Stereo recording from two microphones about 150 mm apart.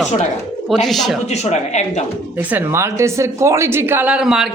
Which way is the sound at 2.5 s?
20° right (ahead or behind).